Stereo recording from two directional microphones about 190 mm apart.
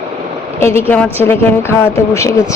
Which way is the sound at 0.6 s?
10° left (ahead or behind).